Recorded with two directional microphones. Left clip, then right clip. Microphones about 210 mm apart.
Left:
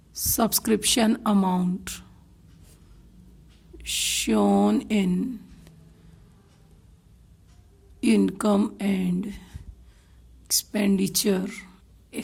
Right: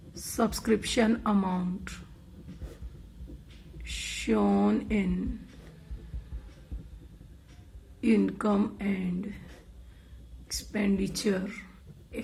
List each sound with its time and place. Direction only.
0.1 s a woman's voice: 60° left (ahead or behind)
4.0 s a woman's voice: 70° left (ahead or behind)
8.0 s a woman's voice: 75° left (ahead or behind)
10.5 s a woman's voice: 70° left (ahead or behind)